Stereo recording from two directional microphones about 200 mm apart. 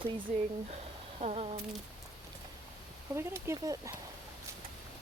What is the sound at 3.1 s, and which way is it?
Speech, 15° right (ahead or behind).